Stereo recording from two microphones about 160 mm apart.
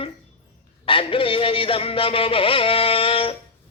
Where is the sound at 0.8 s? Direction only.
35° left (ahead or behind).